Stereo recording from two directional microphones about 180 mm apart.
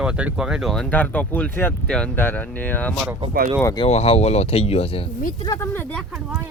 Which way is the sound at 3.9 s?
35° left (ahead or behind).